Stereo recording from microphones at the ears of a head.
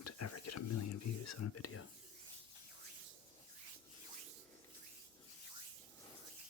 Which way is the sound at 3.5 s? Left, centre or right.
Right.